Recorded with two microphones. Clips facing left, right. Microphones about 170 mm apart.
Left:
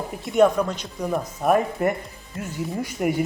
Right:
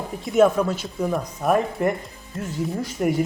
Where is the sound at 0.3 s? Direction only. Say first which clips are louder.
Right 1 dB; centre (ahead or behind).